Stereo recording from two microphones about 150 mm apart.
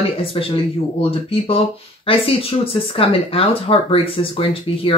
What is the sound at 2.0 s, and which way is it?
Speech, 40° left (ahead or behind).